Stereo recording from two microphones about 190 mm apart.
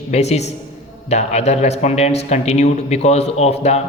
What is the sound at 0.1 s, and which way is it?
A man's voice, 35° left (ahead or behind).